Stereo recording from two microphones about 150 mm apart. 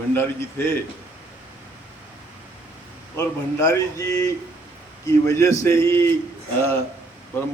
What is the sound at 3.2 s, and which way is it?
A man's voice, 20° left (ahead or behind).